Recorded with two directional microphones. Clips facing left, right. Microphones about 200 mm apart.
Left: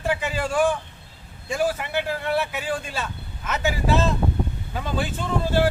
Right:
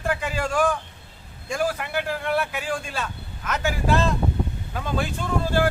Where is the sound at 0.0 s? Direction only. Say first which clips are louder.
Left 1 dB; 5° left (ahead or behind).